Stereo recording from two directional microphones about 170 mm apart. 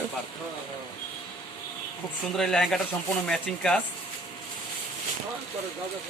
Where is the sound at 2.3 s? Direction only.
5° left (ahead or behind).